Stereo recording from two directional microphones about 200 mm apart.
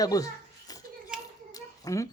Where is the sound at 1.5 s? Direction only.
15° left (ahead or behind).